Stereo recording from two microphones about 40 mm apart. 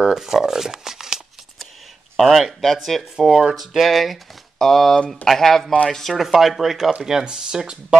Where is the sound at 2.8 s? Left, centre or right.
Centre.